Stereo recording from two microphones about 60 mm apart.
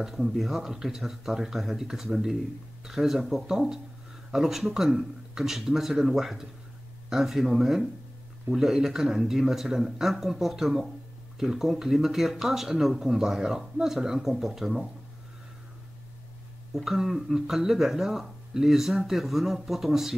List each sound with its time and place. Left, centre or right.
0.0 s speech: centre
16.7 s speech: centre